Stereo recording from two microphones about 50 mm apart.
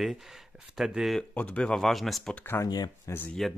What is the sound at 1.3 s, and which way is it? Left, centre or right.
Speech, left.